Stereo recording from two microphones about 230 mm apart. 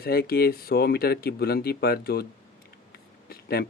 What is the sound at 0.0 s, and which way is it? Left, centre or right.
Speech, left.